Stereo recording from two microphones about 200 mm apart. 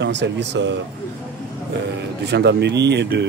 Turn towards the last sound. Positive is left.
turn(degrees=-60)  # may be behind; listen again after turning